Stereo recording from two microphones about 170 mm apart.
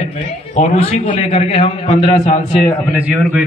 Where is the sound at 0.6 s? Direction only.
35° left (ahead or behind).